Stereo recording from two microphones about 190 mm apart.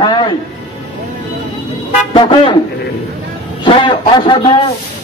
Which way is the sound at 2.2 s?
25° left (ahead or behind).